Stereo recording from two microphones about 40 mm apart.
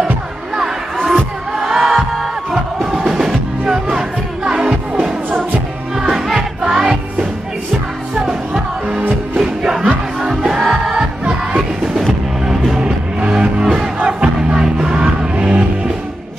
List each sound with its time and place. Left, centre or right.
1.6 s music: centre
9.4 s music: centre
11.0 s music: right
12.4 s music: centre
13.3 s music: centre
14.0 s crowd: right
15.3 s music: right